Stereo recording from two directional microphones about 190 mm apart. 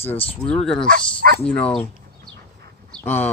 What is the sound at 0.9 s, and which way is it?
Speech, 50° right (ahead or behind).